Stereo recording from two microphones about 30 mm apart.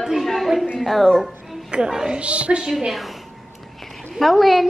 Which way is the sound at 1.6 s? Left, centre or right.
Right.